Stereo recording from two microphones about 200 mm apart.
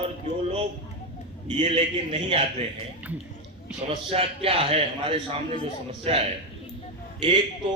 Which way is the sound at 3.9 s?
30° right (ahead or behind).